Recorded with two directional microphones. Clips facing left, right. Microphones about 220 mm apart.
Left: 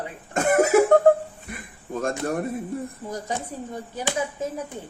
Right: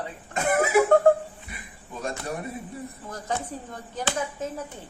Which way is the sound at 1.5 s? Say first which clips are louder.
Left 8 dB; 50° left (ahead or behind).